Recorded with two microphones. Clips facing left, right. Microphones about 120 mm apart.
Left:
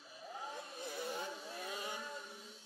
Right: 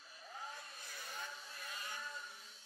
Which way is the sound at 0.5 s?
20° left (ahead or behind).